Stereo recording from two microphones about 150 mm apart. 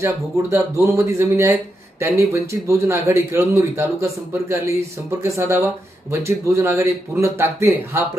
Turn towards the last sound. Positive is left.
turn(degrees=-15)  # may be behind; listen again after turning